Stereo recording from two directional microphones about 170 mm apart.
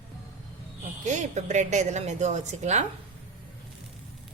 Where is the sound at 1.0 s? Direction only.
45° right (ahead or behind).